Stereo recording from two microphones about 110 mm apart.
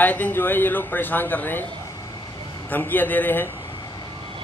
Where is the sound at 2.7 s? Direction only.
15° left (ahead or behind).